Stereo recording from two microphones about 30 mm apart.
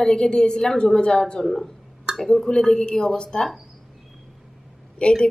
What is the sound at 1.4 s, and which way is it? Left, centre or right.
Speech, centre.